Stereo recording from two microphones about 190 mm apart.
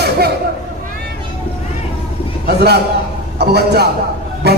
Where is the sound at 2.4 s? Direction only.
60° right (ahead or behind).